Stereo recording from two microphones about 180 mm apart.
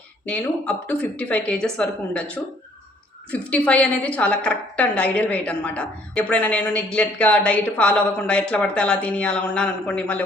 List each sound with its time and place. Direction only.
0.3 s a woman's voice: 5° left (ahead or behind)
3.5 s a woman's voice: 5° left (ahead or behind)